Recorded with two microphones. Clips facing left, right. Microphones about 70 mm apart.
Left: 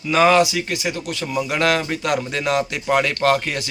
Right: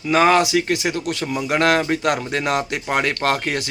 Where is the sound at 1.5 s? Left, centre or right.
Right.